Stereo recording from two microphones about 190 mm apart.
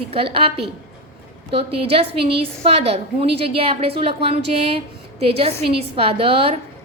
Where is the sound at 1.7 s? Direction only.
30° right (ahead or behind).